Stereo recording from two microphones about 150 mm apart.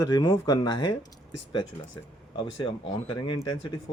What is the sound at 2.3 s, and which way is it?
A man's voice, 35° left (ahead or behind).